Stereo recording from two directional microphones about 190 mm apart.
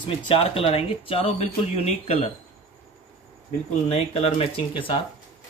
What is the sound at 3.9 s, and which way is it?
Speech, 35° left (ahead or behind).